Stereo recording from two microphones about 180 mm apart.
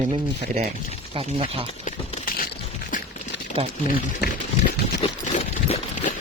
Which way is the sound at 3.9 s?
55° left (ahead or behind).